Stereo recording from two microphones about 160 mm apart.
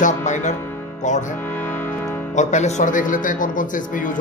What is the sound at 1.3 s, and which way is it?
Music, 10° left (ahead or behind).